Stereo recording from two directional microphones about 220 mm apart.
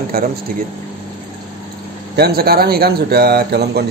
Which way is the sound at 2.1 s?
45° right (ahead or behind).